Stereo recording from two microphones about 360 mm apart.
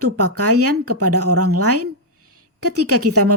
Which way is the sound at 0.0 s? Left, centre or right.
Right.